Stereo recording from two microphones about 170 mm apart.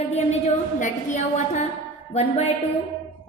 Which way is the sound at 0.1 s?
40° left (ahead or behind).